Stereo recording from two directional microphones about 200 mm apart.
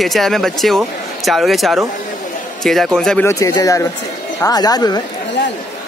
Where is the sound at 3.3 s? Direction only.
15° left (ahead or behind).